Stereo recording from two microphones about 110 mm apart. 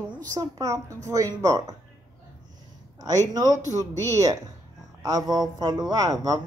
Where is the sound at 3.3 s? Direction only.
35° right (ahead or behind).